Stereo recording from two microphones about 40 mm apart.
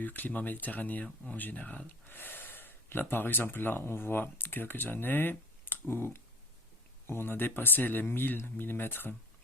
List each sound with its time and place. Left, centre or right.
0.0 s speech: left
2.0 s speech: left
7.1 s speech: left